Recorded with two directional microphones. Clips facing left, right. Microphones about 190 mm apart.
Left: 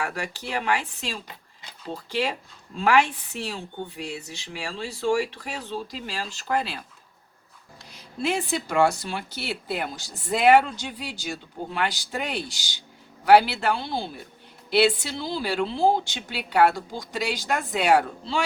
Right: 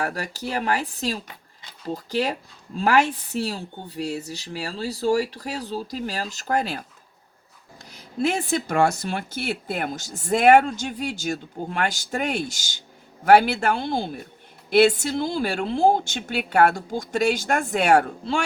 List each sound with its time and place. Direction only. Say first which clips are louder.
0.0 s a woman's voice: right 3 dB; 40° right (ahead or behind)
8.2 s speech: right 3 dB; 45° right (ahead or behind)